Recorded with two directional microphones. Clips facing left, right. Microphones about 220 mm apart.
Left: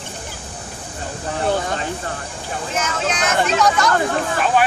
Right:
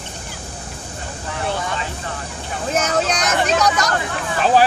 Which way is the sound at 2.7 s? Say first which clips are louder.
Right 5 dB; 40° right (ahead or behind).